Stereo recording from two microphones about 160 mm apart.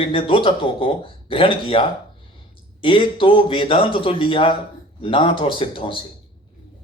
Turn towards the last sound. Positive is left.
turn(degrees=30)  # may be behind; listen again after turning